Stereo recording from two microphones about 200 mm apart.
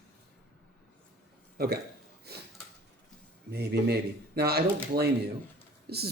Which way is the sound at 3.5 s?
55° right (ahead or behind).